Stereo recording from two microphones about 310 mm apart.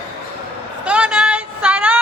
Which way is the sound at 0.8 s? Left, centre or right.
Centre.